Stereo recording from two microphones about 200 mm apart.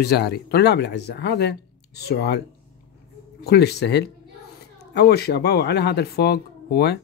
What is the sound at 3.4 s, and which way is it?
Speech, 55° left (ahead or behind).